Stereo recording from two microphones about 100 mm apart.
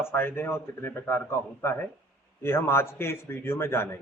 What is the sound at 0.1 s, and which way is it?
A man's voice, 20° left (ahead or behind).